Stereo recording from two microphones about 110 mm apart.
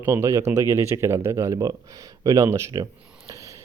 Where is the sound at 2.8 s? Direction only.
30° right (ahead or behind).